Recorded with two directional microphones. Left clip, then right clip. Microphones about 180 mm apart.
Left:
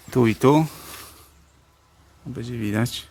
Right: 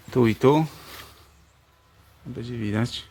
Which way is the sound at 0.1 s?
Centre (ahead or behind).